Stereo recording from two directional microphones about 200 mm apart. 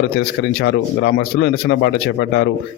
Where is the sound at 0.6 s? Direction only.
55° left (ahead or behind).